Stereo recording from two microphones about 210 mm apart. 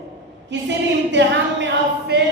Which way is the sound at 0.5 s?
55° right (ahead or behind).